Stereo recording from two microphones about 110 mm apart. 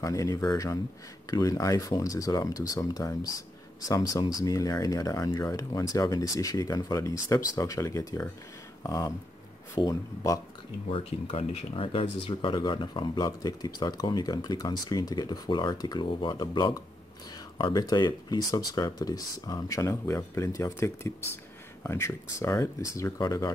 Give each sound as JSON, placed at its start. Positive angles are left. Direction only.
{"t": 0.0, "sound": "speech", "side_deg": 30}
{"t": 10.9, "sound": "speech", "side_deg": 55}